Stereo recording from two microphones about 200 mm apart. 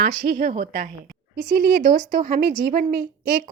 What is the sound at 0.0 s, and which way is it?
A woman's voice, 40° right (ahead or behind).